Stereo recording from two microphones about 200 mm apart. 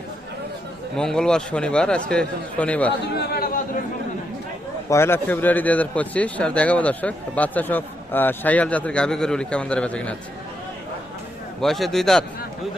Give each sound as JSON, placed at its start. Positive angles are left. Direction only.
{"t": 0.9, "sound": "a man's voice", "side_deg": 5}
{"t": 3.2, "sound": "a man's voice", "side_deg": 50}
{"t": 4.9, "sound": "a man's voice", "side_deg": 10}
{"t": 11.6, "sound": "a man's voice", "side_deg": 0}